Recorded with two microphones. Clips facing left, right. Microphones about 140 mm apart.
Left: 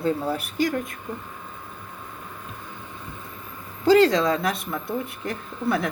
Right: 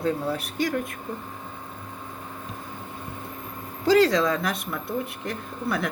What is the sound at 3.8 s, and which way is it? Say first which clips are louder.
Speech: left 2 dB; centre (ahead or behind).